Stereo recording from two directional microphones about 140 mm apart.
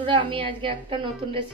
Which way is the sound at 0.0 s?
35° right (ahead or behind).